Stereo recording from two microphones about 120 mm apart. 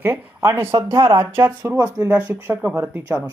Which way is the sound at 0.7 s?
40° right (ahead or behind).